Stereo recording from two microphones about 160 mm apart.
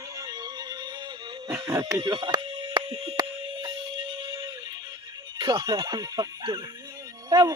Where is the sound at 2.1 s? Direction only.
30° right (ahead or behind).